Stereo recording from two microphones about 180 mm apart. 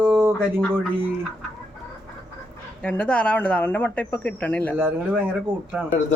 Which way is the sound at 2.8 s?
5° left (ahead or behind).